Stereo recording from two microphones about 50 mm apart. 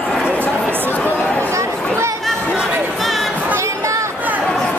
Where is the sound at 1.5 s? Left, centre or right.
Right.